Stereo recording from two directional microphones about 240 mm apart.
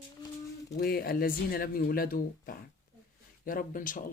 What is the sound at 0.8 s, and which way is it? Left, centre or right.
Speech, left.